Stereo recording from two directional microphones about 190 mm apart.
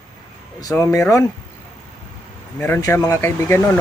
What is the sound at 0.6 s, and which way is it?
Speech, 15° left (ahead or behind).